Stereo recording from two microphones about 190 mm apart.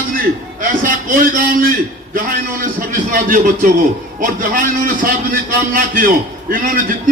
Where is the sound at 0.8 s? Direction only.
50° right (ahead or behind).